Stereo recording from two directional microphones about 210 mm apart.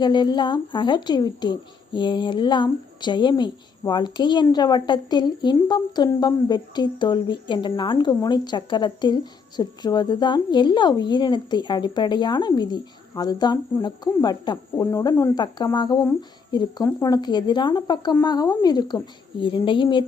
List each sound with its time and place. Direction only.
0.0 s a woman's voice: 20° left (ahead or behind)